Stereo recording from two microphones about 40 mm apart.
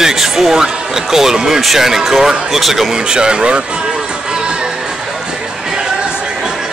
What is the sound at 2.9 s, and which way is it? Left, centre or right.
Speech, right.